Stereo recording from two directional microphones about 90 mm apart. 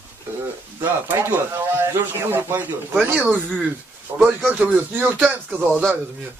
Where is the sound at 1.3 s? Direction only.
25° right (ahead or behind).